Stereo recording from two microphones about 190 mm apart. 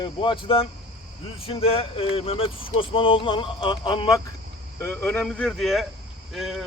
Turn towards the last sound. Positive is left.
turn(degrees=0)  # may be behind; listen again after turning